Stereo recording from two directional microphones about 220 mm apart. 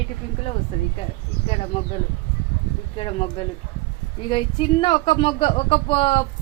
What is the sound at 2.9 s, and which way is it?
Speech, 25° left (ahead or behind).